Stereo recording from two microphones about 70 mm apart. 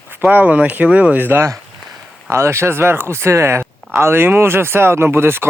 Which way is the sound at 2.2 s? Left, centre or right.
Right.